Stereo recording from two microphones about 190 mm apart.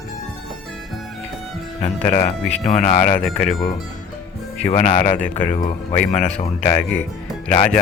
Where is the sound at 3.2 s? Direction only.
Centre (ahead or behind).